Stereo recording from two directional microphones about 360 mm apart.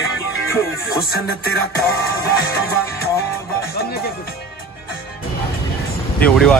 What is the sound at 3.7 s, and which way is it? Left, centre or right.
Music, left.